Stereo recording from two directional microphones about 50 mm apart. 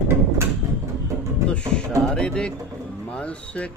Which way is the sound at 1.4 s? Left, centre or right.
Centre.